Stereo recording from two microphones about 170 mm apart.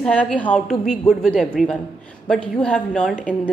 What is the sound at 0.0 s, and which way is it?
A woman's voice, 5° left (ahead or behind).